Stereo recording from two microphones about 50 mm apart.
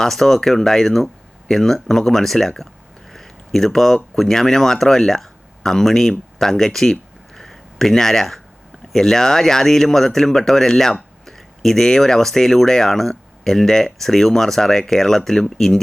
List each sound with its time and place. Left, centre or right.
0.0 s speech: centre